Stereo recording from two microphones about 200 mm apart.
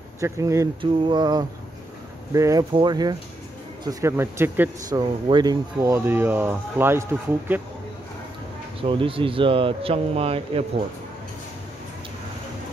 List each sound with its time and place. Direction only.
0.2 s speech: 15° right (ahead or behind)
8.8 s speech: 25° right (ahead or behind)